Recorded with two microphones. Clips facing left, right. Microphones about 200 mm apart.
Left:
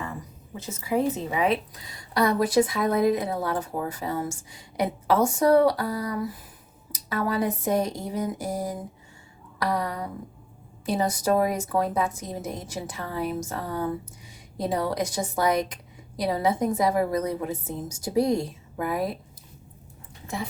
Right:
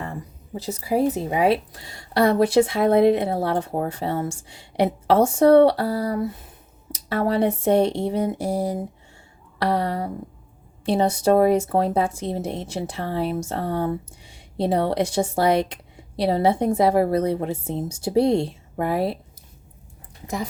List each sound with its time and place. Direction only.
0.0 s a sound: 35° right (ahead or behind)
1.2 s a woman's voice: 30° right (ahead or behind)
20.2 s speech: 40° right (ahead or behind)